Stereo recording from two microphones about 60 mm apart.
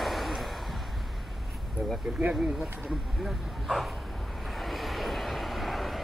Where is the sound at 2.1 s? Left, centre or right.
Right.